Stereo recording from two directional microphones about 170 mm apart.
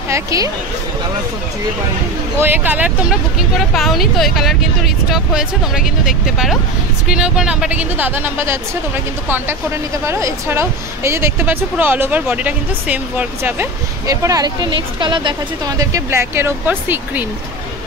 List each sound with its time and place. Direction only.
0.1 s speech: 20° right (ahead or behind)
2.4 s a woman's voice: 10° right (ahead or behind)
10.0 s a woman's voice: 15° right (ahead or behind)